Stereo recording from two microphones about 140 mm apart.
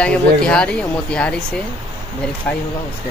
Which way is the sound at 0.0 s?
10° left (ahead or behind).